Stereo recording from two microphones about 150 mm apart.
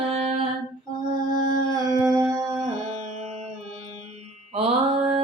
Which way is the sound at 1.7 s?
25° right (ahead or behind).